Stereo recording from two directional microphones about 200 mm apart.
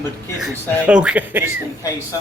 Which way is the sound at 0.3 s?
5° right (ahead or behind).